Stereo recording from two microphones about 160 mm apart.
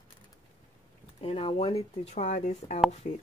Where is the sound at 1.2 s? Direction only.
35° left (ahead or behind).